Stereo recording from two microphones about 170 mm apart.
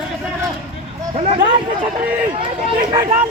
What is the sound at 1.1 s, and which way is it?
Speech, 35° right (ahead or behind).